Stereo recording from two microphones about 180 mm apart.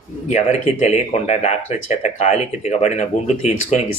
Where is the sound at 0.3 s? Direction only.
40° left (ahead or behind).